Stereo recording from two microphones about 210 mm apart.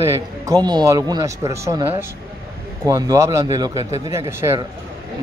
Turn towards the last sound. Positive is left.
turn(degrees=-10)  # may be behind; listen again after turning